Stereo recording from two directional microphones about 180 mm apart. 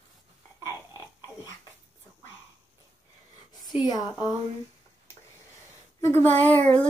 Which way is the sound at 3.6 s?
20° left (ahead or behind).